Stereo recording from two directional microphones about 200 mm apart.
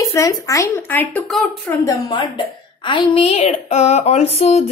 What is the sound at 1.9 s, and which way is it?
Speech, 25° left (ahead or behind).